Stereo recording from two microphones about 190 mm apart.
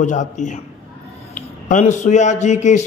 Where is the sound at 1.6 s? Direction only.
40° left (ahead or behind).